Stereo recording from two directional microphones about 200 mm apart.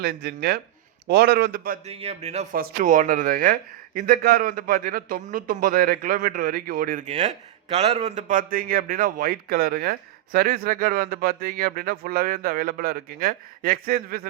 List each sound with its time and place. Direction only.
0.0 s speech: 55° right (ahead or behind)
1.9 s speech: 30° right (ahead or behind); by 14.3 s 45° right (ahead or behind)